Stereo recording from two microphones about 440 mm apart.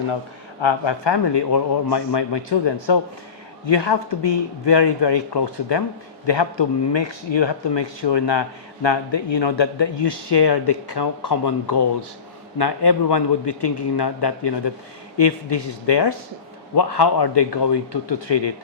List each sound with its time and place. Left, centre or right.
0.6 s a man's voice: left